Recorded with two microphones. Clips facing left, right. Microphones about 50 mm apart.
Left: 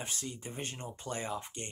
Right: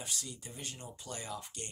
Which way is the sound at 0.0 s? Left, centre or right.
Left.